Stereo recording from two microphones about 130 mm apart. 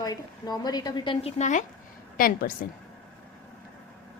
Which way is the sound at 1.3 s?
65° left (ahead or behind).